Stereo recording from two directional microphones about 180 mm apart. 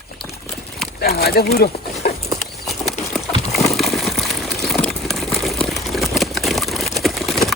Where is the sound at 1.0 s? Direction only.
55° left (ahead or behind).